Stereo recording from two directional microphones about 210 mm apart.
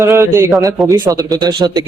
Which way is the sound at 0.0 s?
15° right (ahead or behind).